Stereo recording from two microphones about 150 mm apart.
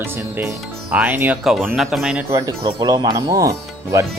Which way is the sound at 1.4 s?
Centre (ahead or behind).